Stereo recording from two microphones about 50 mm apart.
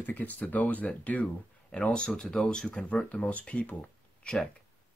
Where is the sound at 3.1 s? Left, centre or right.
Left.